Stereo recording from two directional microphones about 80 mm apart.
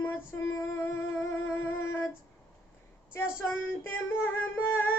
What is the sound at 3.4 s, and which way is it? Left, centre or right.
Child singing, left.